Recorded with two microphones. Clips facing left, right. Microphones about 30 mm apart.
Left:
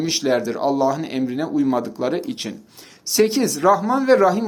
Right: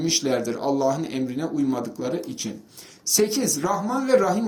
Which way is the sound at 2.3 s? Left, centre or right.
Left.